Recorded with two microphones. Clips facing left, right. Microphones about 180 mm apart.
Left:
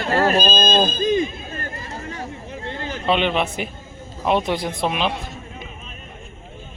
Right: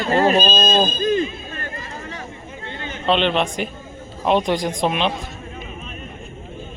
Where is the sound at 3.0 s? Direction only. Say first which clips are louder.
Right 2 dB; 5° left (ahead or behind).